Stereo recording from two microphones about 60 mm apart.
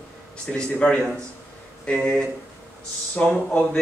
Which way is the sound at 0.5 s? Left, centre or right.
Centre.